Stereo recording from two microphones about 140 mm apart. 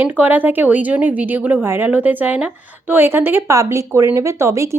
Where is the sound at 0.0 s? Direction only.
15° right (ahead or behind).